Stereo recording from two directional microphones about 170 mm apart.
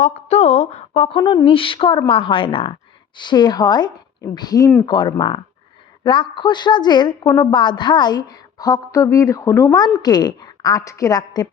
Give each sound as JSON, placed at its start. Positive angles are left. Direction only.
{"t": 0.0, "sound": "a woman's voice", "side_deg": 40}